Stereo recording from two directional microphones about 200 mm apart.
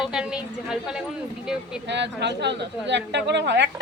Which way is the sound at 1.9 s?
60° right (ahead or behind).